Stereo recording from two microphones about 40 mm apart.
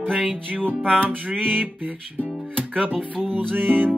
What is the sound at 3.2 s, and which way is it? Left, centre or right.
Music, right.